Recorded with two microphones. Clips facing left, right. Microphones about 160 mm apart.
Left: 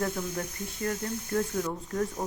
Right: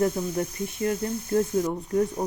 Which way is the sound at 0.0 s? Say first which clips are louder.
Right 6 dB; 20° right (ahead or behind).